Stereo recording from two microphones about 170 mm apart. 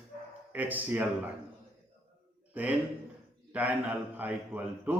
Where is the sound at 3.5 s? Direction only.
10° right (ahead or behind).